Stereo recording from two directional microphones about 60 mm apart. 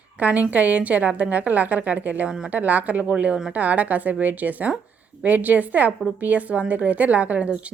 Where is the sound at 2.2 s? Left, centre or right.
Centre.